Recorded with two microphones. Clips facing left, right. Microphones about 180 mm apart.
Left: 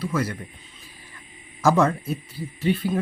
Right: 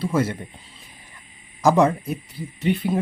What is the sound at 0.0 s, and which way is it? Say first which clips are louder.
Speech: right 4 dB; 25° right (ahead or behind).